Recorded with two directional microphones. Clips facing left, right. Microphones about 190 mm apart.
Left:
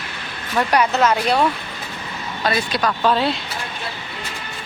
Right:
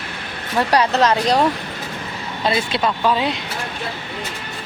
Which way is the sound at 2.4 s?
25° right (ahead or behind).